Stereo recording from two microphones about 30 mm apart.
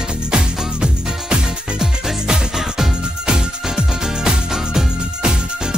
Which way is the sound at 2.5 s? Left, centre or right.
Centre.